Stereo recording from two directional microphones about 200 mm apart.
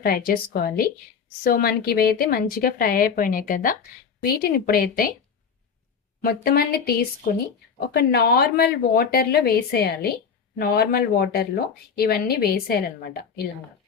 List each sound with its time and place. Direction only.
0.0 s speech: 45° left (ahead or behind)
6.2 s speech: 50° left (ahead or behind)